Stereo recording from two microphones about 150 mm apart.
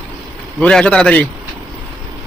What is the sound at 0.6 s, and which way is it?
Speech, 5° left (ahead or behind).